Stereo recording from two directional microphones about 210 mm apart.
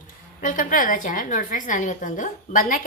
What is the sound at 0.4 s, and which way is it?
A woman's voice, 40° left (ahead or behind).